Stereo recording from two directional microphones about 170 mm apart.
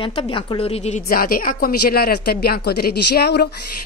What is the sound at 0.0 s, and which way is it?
A woman's voice, 30° left (ahead or behind).